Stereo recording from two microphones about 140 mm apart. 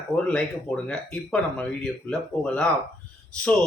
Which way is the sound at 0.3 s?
5° left (ahead or behind).